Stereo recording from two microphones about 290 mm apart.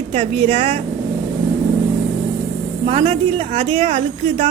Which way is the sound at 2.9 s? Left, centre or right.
Centre.